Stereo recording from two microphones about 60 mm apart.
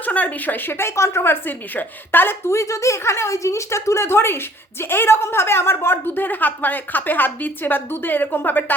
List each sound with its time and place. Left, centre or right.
0.0 s a woman's voice: left
1.2 s a woman's voice: left
2.5 s a woman's voice: left